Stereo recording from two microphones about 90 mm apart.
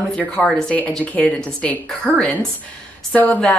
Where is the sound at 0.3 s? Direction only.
10° left (ahead or behind).